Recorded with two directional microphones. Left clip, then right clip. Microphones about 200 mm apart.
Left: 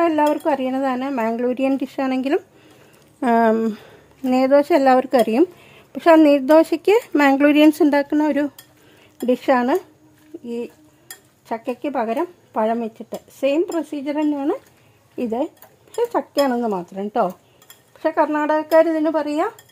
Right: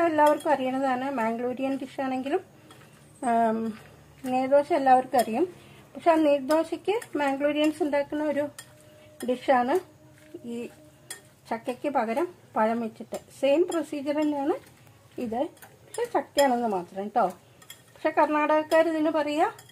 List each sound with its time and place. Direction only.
0.0 s a woman's voice: 45° left (ahead or behind)
11.4 s speech: 40° left (ahead or behind)